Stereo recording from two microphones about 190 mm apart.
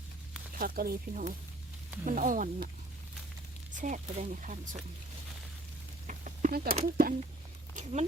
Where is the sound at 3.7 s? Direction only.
40° right (ahead or behind).